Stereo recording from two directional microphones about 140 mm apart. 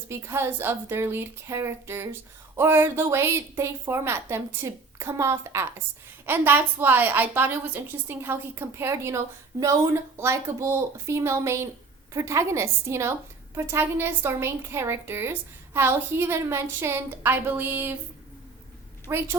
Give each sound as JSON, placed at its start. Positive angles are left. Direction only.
{"t": 0.1, "sound": "a woman's voice", "side_deg": -20}
{"t": 19.0, "sound": "a woman's voice", "side_deg": -20}